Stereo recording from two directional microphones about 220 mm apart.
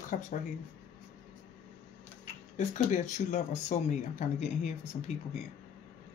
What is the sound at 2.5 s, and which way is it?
Speech, 35° left (ahead or behind).